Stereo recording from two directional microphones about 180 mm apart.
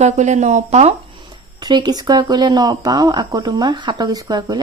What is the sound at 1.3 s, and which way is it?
Speech, 25° right (ahead or behind).